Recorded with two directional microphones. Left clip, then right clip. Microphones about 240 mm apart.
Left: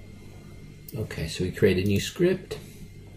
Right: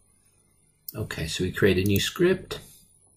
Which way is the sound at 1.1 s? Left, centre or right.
Right.